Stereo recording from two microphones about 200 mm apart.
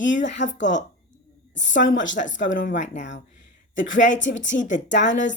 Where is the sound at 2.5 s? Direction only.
40° left (ahead or behind).